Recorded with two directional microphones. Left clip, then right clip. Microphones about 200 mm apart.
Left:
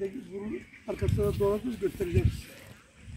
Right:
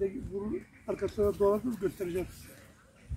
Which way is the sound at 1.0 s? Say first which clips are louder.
Right 1 dB; 20° left (ahead or behind).